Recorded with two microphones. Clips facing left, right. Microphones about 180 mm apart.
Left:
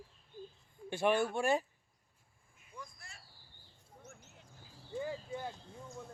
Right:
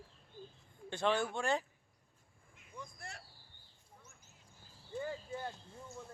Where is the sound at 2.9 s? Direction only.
65° right (ahead or behind).